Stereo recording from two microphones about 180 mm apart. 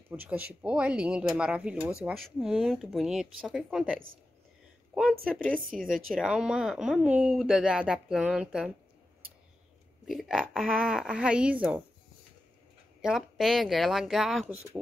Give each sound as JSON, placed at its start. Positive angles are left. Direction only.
{"t": 0.1, "sound": "speech", "side_deg": -10}
{"t": 4.9, "sound": "a sound", "side_deg": 0}
{"t": 5.6, "sound": "speech", "side_deg": -50}
{"t": 6.1, "sound": "speech", "side_deg": -5}
{"t": 10.0, "sound": "speech", "side_deg": 0}
{"t": 13.0, "sound": "speech", "side_deg": 0}